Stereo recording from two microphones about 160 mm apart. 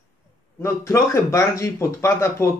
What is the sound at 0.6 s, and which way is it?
Speech, 15° left (ahead or behind).